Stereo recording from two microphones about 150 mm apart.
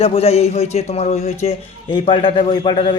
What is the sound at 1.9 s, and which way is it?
A man's voice, 35° left (ahead or behind).